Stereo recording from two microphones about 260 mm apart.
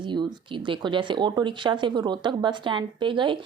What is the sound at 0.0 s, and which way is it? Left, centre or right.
Speech, centre.